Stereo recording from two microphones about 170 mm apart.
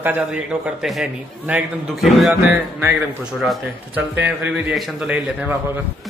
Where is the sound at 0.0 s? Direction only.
10° right (ahead or behind).